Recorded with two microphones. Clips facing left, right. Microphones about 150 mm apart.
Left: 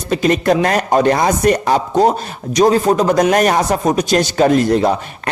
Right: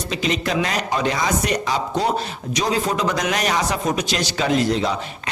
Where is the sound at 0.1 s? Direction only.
50° left (ahead or behind).